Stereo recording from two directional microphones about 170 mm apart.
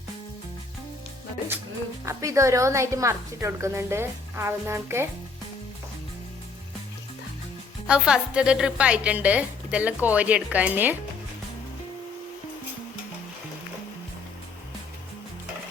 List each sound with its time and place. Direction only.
2.0 s a woman's voice: 15° right (ahead or behind)
7.9 s a woman's voice: 5° right (ahead or behind)